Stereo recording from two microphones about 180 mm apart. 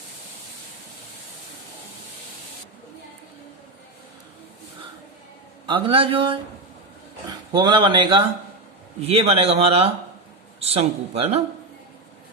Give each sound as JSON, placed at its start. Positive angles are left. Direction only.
{"t": 5.6, "sound": "speech", "side_deg": -30}